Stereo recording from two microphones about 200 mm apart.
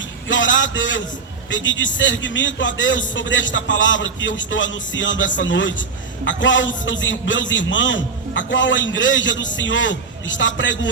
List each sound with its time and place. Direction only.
0.3 s a man's voice: 70° left (ahead or behind)